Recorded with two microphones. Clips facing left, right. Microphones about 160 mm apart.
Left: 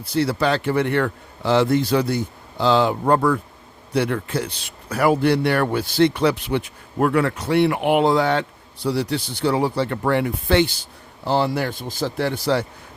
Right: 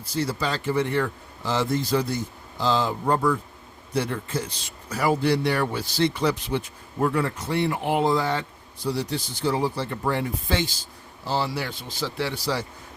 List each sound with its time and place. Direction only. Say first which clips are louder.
0.0 s a man's voice: left 7 dB; 65° left (ahead or behind)